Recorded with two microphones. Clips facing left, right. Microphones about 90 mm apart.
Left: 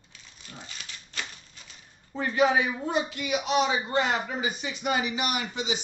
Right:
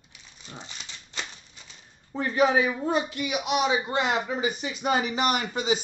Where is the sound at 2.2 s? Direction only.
35° right (ahead or behind).